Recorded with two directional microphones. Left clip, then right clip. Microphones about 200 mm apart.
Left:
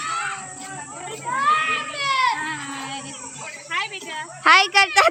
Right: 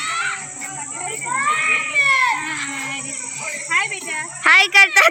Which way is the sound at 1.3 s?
30° right (ahead or behind).